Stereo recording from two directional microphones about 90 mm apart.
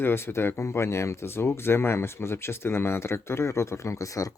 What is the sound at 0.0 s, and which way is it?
Speech, 25° left (ahead or behind).